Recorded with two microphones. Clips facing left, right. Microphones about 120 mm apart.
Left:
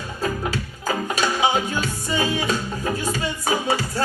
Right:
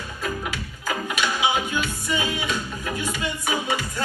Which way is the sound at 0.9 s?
40° left (ahead or behind).